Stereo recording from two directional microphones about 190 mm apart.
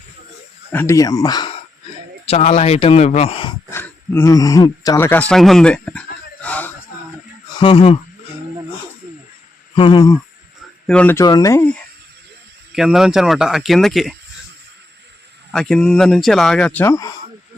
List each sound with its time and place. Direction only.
0.7 s speech: 10° left (ahead or behind)
2.2 s speech: 35° left (ahead or behind)
3.7 s a sound: 10° left (ahead or behind)
7.5 s speech: 25° left (ahead or behind)
9.7 s speech: 25° left (ahead or behind)
10.8 s speech: 5° left (ahead or behind)
12.7 s speech: centre (ahead or behind)
15.5 s speech: 5° left (ahead or behind)